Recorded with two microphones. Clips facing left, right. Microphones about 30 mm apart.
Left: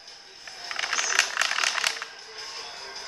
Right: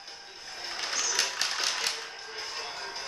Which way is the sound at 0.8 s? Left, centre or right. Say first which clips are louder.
Left 6 dB; left.